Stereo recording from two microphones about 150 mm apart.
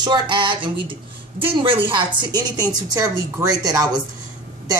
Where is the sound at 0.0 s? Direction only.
30° right (ahead or behind).